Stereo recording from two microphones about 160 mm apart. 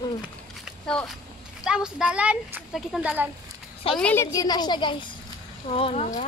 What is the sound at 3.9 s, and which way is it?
A woman's voice, 10° left (ahead or behind).